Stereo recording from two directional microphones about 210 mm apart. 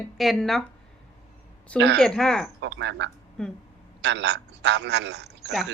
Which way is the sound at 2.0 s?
Centre (ahead or behind).